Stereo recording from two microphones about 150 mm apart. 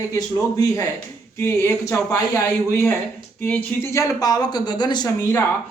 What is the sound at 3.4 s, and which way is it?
Speech, 15° left (ahead or behind).